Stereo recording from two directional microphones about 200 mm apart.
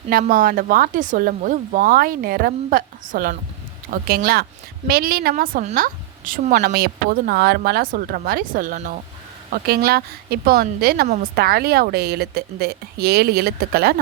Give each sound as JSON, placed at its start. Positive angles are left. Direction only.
{"t": 0.1, "sound": "a woman's voice", "side_deg": -45}